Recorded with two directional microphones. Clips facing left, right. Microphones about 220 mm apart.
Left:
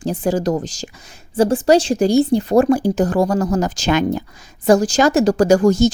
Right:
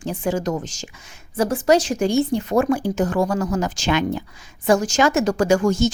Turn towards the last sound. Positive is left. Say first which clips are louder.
# left 5 dB
turn(degrees=35)  # may be behind; listen again after turning